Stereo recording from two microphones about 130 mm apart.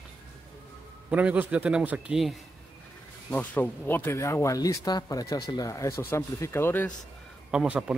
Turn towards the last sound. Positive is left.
turn(degrees=-5)  # may be behind; listen again after turning